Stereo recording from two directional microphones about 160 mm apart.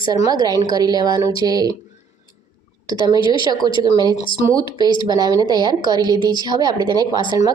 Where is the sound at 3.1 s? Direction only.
30° left (ahead or behind).